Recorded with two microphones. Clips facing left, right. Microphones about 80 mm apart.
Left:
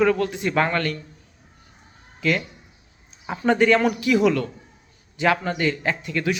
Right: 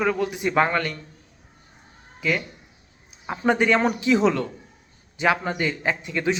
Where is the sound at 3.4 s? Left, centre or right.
Centre.